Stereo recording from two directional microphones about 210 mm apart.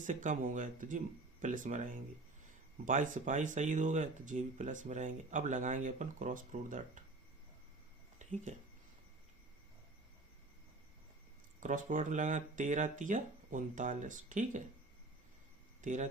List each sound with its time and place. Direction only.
0.0 s speech: 35° right (ahead or behind)
8.2 s speech: 35° right (ahead or behind)
11.6 s speech: 40° right (ahead or behind)
15.8 s speech: 35° right (ahead or behind)